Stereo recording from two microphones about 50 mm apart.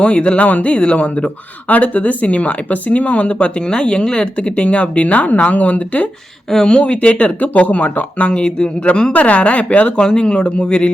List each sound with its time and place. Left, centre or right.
0.0 s speech: left
6.5 s speech: centre; by 8.3 s left
8.3 s speech: centre